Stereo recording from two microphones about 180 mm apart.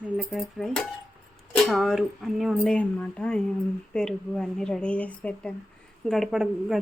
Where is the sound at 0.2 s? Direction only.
Centre (ahead or behind).